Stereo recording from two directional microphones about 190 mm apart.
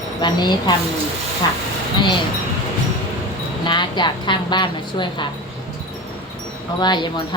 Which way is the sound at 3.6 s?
25° left (ahead or behind).